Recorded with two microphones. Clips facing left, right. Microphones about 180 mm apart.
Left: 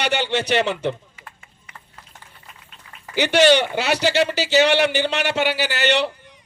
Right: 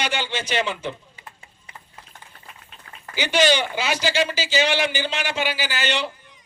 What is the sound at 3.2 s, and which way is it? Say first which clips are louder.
A man's voice: left 5 dB; 70° left (ahead or behind).